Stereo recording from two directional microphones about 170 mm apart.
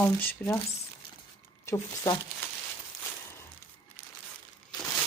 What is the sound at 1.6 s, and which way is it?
Speech, 20° left (ahead or behind).